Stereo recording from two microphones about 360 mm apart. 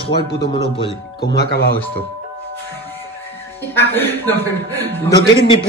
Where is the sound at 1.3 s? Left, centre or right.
Left.